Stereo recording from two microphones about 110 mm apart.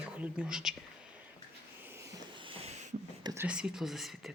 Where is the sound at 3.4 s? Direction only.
5° right (ahead or behind).